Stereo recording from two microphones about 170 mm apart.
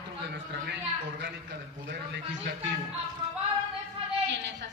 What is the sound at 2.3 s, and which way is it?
Speech, 90° right.